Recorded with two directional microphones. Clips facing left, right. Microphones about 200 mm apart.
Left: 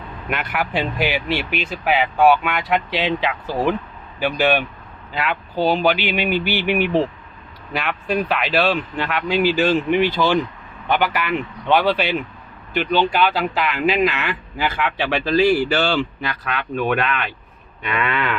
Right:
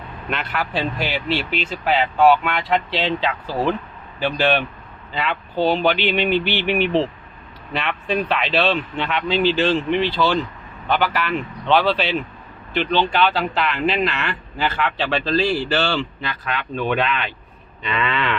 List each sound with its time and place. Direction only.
0.3 s speech: 15° left (ahead or behind)
17.8 s speech: 10° left (ahead or behind)